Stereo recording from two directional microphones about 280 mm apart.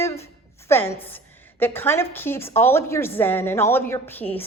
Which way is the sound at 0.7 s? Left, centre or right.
Centre.